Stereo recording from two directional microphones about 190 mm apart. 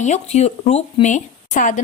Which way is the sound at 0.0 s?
35° left (ahead or behind).